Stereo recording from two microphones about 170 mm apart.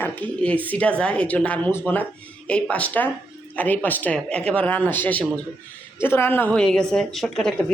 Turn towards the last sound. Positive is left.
turn(degrees=5)  # may be behind; listen again after turning